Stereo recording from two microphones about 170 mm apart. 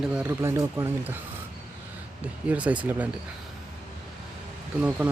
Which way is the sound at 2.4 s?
10° right (ahead or behind).